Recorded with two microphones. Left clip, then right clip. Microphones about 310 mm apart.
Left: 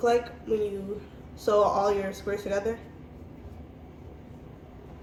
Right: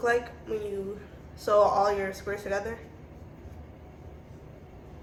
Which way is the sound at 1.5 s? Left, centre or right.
Right.